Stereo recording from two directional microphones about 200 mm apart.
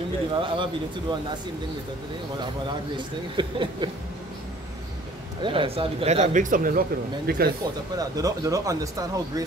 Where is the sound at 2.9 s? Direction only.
25° right (ahead or behind).